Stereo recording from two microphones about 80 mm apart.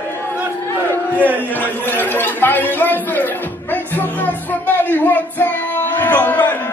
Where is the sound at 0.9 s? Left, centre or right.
Left.